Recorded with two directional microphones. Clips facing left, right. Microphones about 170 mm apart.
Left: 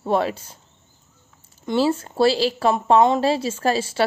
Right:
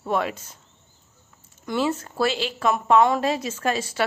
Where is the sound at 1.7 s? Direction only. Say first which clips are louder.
Left 4 dB; 30° left (ahead or behind).